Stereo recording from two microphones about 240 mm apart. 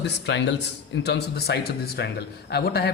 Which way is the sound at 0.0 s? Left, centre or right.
Left.